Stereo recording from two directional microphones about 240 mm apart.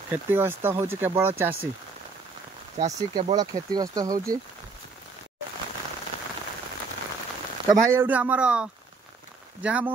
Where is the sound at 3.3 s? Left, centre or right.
Centre.